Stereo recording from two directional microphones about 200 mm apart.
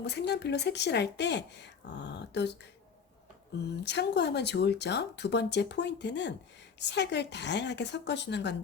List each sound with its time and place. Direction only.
0.0 s speech: 55° left (ahead or behind)
3.8 s speech: 60° left (ahead or behind)